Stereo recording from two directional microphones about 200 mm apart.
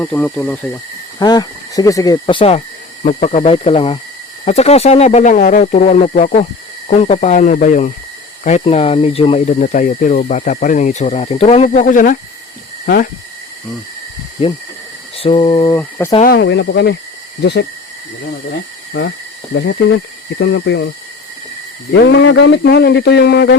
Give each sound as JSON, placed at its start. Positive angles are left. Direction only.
{"t": 0.0, "sound": "speech", "side_deg": 5}
{"t": 1.2, "sound": "speech", "side_deg": 20}
{"t": 3.0, "sound": "speech", "side_deg": 40}
{"t": 12.8, "sound": "speech", "side_deg": 50}
{"t": 15.1, "sound": "mantra", "side_deg": 30}
{"t": 15.8, "sound": "speech", "side_deg": 10}
{"t": 16.2, "sound": "speech", "side_deg": 55}
{"t": 19.5, "sound": "speech", "side_deg": 60}
{"t": 21.9, "sound": "speech", "side_deg": 60}